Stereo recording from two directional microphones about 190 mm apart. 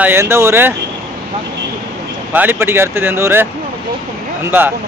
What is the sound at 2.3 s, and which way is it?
Speech, 10° right (ahead or behind).